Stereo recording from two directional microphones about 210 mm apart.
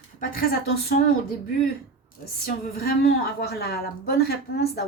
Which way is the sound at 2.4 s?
45° left (ahead or behind).